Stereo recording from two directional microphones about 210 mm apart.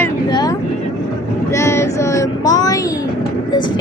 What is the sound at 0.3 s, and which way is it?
Vehicle, 20° left (ahead or behind).